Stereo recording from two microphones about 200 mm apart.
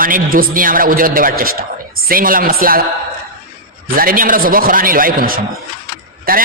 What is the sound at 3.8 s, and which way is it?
A man's voice, 45° right (ahead or behind).